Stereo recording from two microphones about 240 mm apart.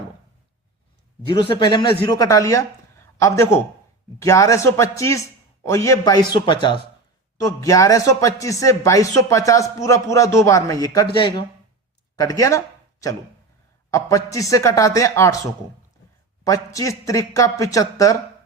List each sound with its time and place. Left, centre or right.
1.3 s a man's voice: centre
16.4 s speech: centre